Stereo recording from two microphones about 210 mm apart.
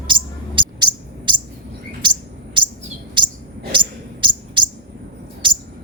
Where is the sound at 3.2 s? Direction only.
25° right (ahead or behind).